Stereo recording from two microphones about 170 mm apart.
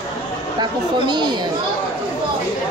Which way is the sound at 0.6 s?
25° right (ahead or behind).